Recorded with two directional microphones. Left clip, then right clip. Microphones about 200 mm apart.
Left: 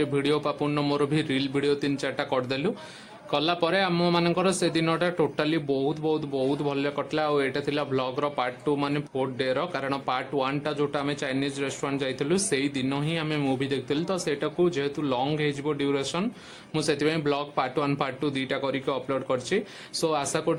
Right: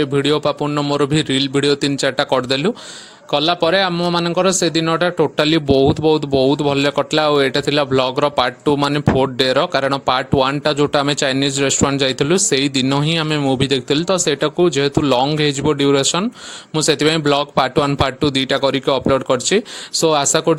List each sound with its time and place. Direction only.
0.0 s speech: 35° right (ahead or behind)